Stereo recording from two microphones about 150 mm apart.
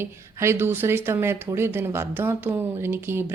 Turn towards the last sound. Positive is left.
turn(degrees=-15)  # may be behind; listen again after turning